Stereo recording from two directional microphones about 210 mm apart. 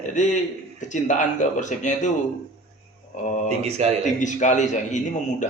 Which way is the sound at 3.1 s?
35° left (ahead or behind).